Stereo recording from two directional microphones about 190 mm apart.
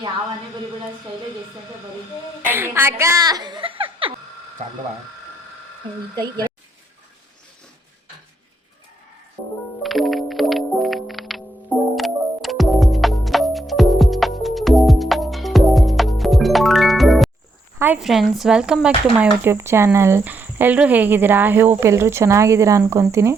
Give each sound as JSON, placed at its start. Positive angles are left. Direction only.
{"t": 2.5, "sound": "speech", "side_deg": -10}
{"t": 6.1, "sound": "speech", "side_deg": -20}
{"t": 9.8, "sound": "music", "side_deg": 0}
{"t": 17.7, "sound": "speech", "side_deg": -10}